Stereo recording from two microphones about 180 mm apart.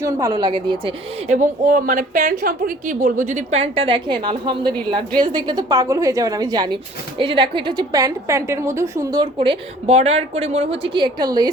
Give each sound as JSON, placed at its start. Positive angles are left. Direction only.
{"t": 0.0, "sound": "a woman's voice", "side_deg": -20}
{"t": 1.3, "sound": "a woman's voice", "side_deg": -45}